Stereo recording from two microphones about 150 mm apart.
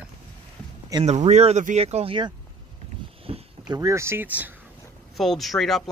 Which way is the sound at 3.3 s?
40° right (ahead or behind).